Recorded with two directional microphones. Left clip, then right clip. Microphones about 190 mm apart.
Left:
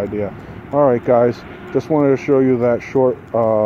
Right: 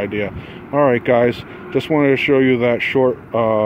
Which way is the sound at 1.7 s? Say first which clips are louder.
Even; 5° right (ahead or behind).